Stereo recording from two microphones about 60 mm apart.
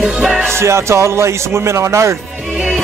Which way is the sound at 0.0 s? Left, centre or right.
Centre.